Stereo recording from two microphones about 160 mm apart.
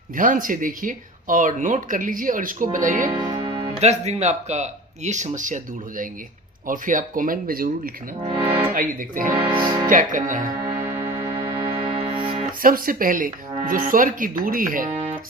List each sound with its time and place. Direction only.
0.2 s speech: 60° right (ahead or behind)
3.1 s music: 30° right (ahead or behind)
3.8 s speech: 45° right (ahead or behind); by 7.7 s 60° right (ahead or behind)
8.2 s music: 35° right (ahead or behind)
8.7 s speech: 60° right (ahead or behind)
10.6 s music: 15° right (ahead or behind)
12.6 s speech: 60° right (ahead or behind)